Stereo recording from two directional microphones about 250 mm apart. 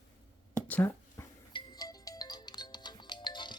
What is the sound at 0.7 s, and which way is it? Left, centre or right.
Music, centre.